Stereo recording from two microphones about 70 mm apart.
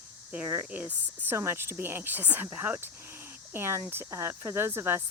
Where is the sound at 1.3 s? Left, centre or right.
Right.